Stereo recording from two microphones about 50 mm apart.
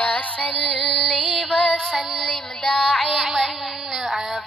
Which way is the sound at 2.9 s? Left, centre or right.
Centre.